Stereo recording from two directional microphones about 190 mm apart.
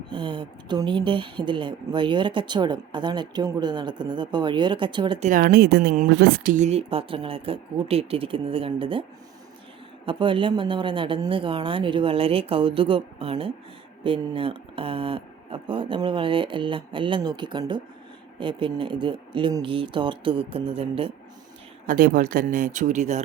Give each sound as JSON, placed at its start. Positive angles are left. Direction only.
{"t": 0.1, "sound": "a woman's voice", "side_deg": -25}
{"t": 5.2, "sound": "a woman's voice", "side_deg": -45}
{"t": 10.1, "sound": "a woman's voice", "side_deg": -25}
{"t": 21.8, "sound": "speech", "side_deg": -45}